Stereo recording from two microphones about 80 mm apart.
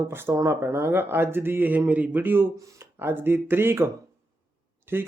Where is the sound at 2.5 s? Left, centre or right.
Right.